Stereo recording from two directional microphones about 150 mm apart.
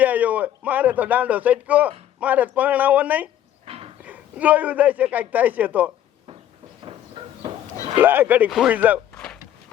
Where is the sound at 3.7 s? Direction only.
40° right (ahead or behind).